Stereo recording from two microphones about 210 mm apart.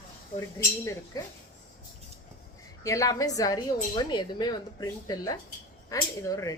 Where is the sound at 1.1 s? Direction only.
20° left (ahead or behind).